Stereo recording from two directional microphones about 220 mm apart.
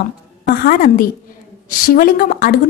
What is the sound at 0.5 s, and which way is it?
A woman's voice, 40° left (ahead or behind).